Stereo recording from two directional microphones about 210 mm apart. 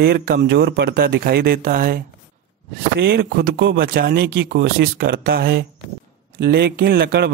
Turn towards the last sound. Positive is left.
turn(degrees=-50)  # may be behind; listen again after turning